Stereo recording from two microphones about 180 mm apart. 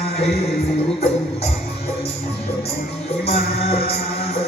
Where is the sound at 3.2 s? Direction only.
35° left (ahead or behind).